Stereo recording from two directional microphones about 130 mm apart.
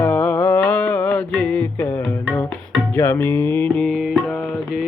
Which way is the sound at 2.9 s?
20° left (ahead or behind).